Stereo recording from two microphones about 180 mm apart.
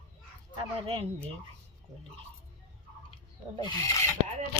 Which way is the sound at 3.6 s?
20° left (ahead or behind).